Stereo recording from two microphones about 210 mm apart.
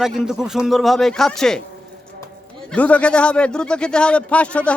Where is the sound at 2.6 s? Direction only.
5° left (ahead or behind).